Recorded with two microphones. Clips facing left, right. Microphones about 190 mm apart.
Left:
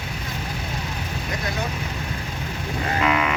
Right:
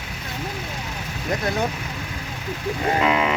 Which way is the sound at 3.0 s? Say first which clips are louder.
Even; 25° right (ahead or behind).